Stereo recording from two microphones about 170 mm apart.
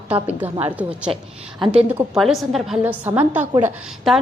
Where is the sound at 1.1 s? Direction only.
30° right (ahead or behind).